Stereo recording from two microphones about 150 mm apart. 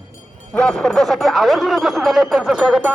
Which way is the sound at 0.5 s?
5° left (ahead or behind).